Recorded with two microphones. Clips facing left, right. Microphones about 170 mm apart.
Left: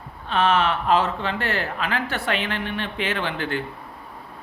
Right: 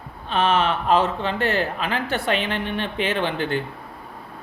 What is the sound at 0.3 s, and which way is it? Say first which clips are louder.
Speech: even; 20° right (ahead or behind).